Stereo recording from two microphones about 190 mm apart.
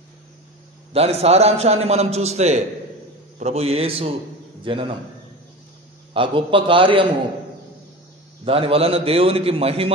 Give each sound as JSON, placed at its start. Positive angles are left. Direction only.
{"t": 0.9, "sound": "a man's voice", "side_deg": -30}
{"t": 6.1, "sound": "a man's voice", "side_deg": -25}
{"t": 8.5, "sound": "a man's voice", "side_deg": -30}